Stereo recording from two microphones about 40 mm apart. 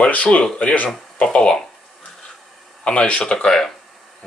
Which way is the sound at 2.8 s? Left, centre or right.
Left.